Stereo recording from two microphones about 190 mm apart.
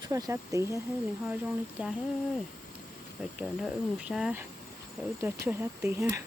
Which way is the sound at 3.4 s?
5° right (ahead or behind).